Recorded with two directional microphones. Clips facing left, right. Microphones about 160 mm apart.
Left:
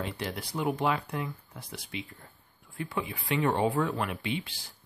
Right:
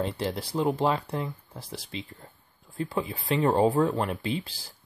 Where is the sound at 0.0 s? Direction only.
30° right (ahead or behind).